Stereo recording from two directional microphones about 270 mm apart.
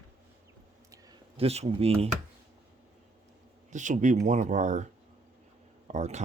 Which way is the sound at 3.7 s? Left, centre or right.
Right.